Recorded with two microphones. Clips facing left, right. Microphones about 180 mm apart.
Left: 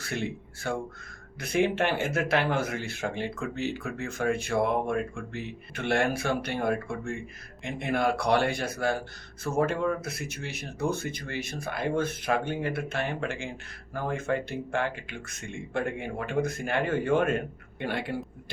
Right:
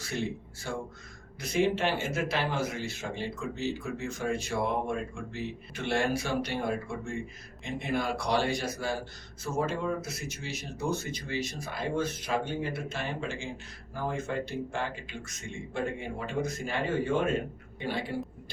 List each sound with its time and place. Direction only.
0.0 s speech: 60° left (ahead or behind)